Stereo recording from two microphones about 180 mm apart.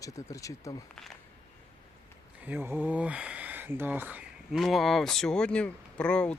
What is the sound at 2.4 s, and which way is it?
Speech, 10° right (ahead or behind).